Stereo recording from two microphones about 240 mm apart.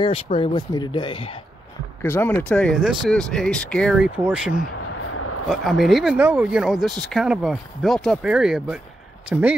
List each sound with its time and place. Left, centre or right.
0.0 s speech: left
2.0 s speech: centre
5.1 s a sound: left
5.5 s speech: centre